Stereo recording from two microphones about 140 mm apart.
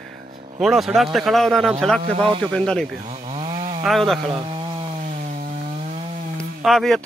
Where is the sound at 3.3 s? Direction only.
45° right (ahead or behind).